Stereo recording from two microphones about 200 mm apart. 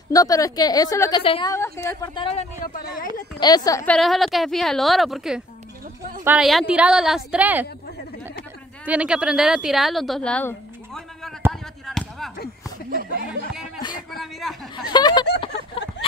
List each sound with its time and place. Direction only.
0.1 s a woman's voice: 15° left (ahead or behind)
1.2 s a woman's voice: 25° left (ahead or behind)
1.5 s a woman's voice: 15° left (ahead or behind)
2.6 s speech: 45° left (ahead or behind)
3.3 s a woman's voice: 20° left (ahead or behind)
3.8 s a woman's voice: centre (ahead or behind)
8.8 s a woman's voice: 5° right (ahead or behind)
11.8 s chop: centre (ahead or behind)
12.9 s speech: 50° right (ahead or behind)
13.7 s a sound: 20° left (ahead or behind)
14.1 s a woman's voice: centre (ahead or behind)
14.9 s a woman's voice: 20° left (ahead or behind)